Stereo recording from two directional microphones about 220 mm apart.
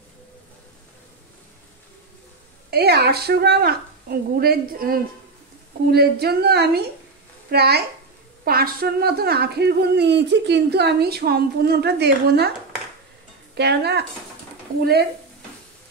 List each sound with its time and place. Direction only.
2.7 s a woman's voice: 45° right (ahead or behind)
13.6 s a woman's voice: 50° right (ahead or behind)